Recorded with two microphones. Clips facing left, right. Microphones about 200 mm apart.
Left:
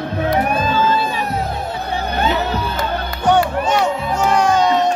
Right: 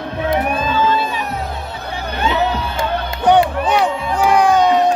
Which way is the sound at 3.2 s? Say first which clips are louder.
Right 2 dB; 15° right (ahead or behind).